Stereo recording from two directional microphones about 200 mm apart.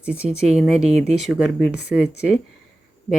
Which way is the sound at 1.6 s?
55° left (ahead or behind).